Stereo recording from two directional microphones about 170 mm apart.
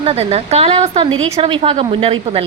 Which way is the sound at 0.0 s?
35° right (ahead or behind).